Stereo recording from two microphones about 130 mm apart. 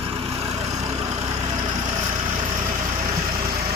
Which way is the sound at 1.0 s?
30° right (ahead or behind).